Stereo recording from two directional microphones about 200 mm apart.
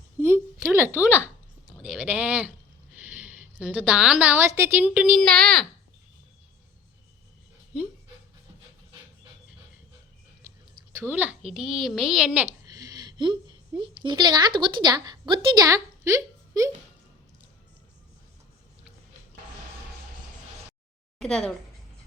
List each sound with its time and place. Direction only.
0.2 s a sound: 10° right (ahead or behind)
3.0 s a woman's voice: 5° right (ahead or behind)
10.9 s a woman's voice: 10° right (ahead or behind)
21.2 s speech: 5° left (ahead or behind)